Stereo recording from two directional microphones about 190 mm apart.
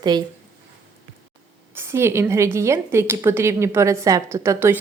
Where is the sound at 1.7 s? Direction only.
10° right (ahead or behind).